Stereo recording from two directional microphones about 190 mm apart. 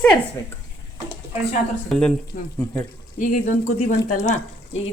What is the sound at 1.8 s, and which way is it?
Speech, 5° left (ahead or behind).